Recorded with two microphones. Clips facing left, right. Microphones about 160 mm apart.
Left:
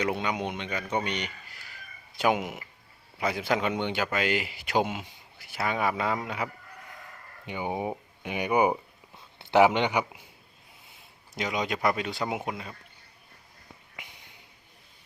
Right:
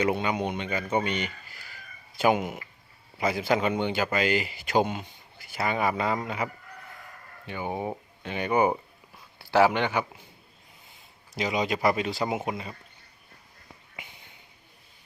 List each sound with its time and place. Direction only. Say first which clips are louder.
0.0 s a man's voice: right 3 dB; centre (ahead or behind)
7.4 s speech: even; 15° left (ahead or behind)
10.8 s speech: even; centre (ahead or behind)